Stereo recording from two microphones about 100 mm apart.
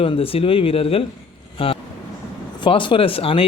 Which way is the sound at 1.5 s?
65° left (ahead or behind).